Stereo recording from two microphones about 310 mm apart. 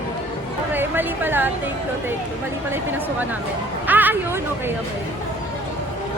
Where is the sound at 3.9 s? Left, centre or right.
Centre.